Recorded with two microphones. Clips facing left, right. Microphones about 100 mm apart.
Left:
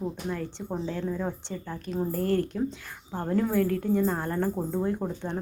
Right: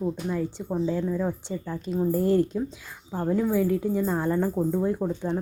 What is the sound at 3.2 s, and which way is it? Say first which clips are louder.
Speech: right 2 dB; 5° right (ahead or behind).